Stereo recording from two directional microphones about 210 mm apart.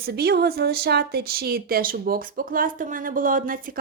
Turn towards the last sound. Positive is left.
turn(degrees=-40)  # may be behind; listen again after turning